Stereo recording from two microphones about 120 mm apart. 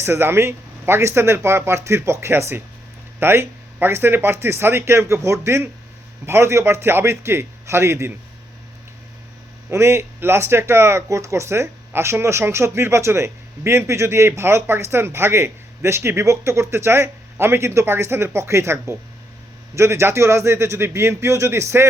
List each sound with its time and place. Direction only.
0.0 s speech: 20° right (ahead or behind)
9.6 s speech: 20° right (ahead or behind)